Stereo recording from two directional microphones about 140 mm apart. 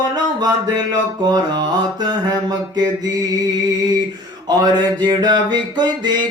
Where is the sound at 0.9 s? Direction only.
30° right (ahead or behind).